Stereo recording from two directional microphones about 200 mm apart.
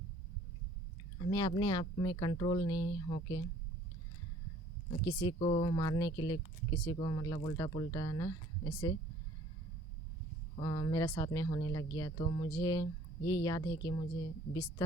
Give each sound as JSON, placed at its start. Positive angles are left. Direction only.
{"t": 1.2, "sound": "speech", "side_deg": 20}
{"t": 5.0, "sound": "speech", "side_deg": 20}
{"t": 10.6, "sound": "speech", "side_deg": 20}